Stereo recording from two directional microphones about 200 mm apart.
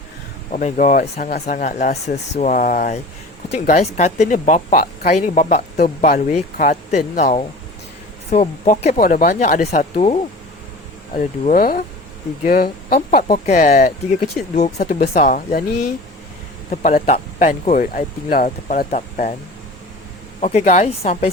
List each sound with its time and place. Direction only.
0.5 s speech: 35° left (ahead or behind)
14.2 s speech: 35° left (ahead or behind)
14.8 s speech: 50° left (ahead or behind)
16.8 s speech: 40° left (ahead or behind)
20.4 s speech: 35° left (ahead or behind)